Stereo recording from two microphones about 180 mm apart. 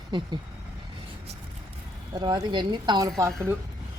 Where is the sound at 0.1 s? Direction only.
25° right (ahead or behind).